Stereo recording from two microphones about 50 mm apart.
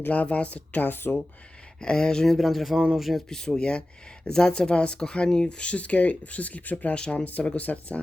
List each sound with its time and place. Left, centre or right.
0.0 s speech: left
1.8 s speech: centre
3.2 s speech: centre; by 6.9 s left
6.9 s speech: centre
7.3 s speech: left